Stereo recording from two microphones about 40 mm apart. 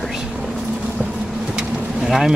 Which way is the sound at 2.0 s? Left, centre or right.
Centre.